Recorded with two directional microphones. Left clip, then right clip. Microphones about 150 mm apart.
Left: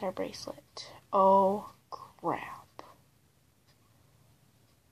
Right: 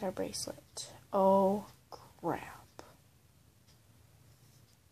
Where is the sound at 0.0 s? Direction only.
15° right (ahead or behind).